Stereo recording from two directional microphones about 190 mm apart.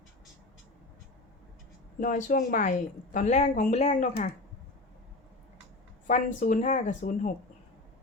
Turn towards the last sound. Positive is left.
turn(degrees=40)  # may be behind; listen again after turning